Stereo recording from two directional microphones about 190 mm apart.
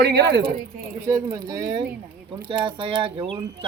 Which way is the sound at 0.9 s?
15° right (ahead or behind).